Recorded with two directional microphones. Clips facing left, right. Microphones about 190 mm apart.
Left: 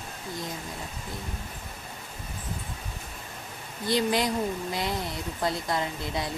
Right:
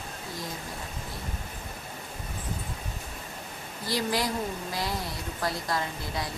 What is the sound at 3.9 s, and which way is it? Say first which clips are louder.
Speech: left 3 dB; 20° left (ahead or behind).